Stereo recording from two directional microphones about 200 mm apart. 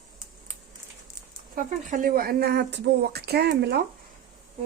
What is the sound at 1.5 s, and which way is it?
Speech, 40° right (ahead or behind).